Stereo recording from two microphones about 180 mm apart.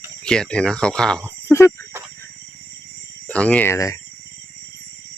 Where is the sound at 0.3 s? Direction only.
5° left (ahead or behind).